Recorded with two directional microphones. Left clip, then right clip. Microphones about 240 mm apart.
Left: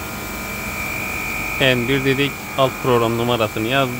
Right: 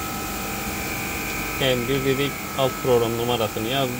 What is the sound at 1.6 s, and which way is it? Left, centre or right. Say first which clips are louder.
Speech: left 5 dB; left.